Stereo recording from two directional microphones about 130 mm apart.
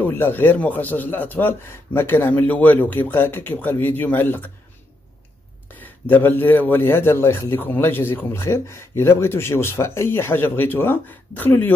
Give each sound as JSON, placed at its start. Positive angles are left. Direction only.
{"t": 0.0, "sound": "a man's voice", "side_deg": 15}
{"t": 5.7, "sound": "a man's voice", "side_deg": 15}